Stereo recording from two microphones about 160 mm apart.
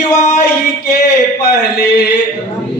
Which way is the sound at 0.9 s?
75° left (ahead or behind).